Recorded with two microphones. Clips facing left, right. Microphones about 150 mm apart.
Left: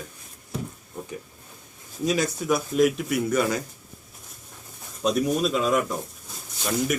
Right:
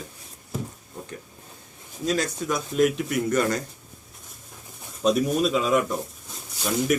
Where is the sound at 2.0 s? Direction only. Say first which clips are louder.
Left 1 dB; 10° left (ahead or behind).